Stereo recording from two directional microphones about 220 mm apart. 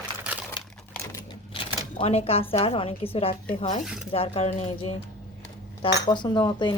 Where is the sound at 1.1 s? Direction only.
25° left (ahead or behind).